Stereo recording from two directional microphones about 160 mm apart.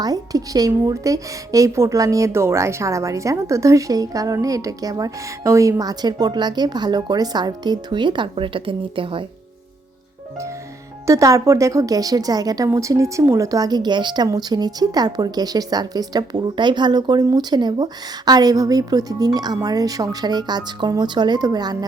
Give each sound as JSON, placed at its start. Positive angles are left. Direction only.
{"t": 0.0, "sound": "a woman's voice", "side_deg": -25}
{"t": 11.0, "sound": "a woman's voice", "side_deg": -20}